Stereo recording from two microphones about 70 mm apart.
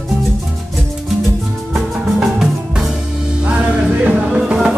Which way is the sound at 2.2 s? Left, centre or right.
Centre.